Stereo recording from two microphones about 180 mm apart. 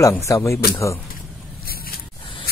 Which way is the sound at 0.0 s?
15° left (ahead or behind).